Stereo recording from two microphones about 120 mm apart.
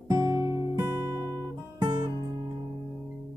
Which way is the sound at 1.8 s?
35° right (ahead or behind).